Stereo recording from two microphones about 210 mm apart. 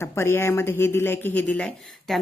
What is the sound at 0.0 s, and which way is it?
A woman's voice, 10° left (ahead or behind).